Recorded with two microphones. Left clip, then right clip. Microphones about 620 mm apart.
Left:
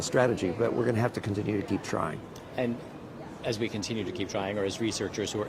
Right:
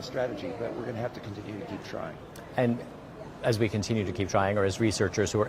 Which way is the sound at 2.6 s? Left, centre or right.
Right.